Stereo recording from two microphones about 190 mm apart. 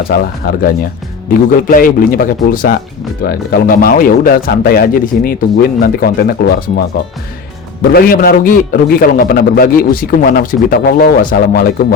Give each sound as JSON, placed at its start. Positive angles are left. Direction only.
{"t": 0.4, "sound": "a man's voice", "side_deg": 50}
{"t": 7.9, "sound": "a man's voice", "side_deg": 50}